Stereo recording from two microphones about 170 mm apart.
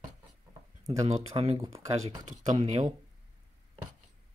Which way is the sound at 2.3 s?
45° right (ahead or behind).